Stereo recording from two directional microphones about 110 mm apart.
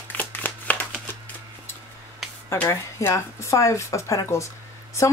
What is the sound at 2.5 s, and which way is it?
Speech, 25° left (ahead or behind).